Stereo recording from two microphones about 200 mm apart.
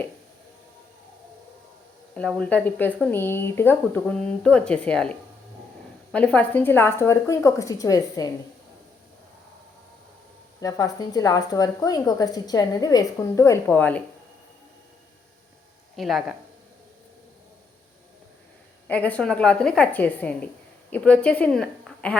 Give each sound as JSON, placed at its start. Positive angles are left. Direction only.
{"t": 2.1, "sound": "a woman's voice", "side_deg": 5}
{"t": 10.6, "sound": "a woman's voice", "side_deg": 15}
{"t": 16.0, "sound": "a woman's voice", "side_deg": 0}
{"t": 18.9, "sound": "a woman's voice", "side_deg": 5}